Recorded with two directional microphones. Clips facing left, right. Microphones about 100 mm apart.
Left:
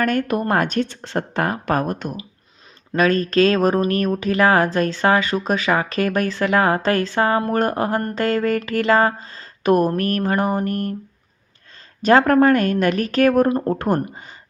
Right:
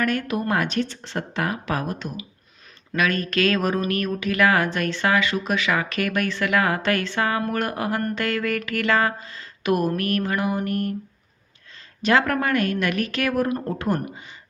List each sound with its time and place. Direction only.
0.0 s a woman's voice: 45° left (ahead or behind)
2.9 s speech: 35° left (ahead or behind)
12.0 s a woman's voice: 40° left (ahead or behind)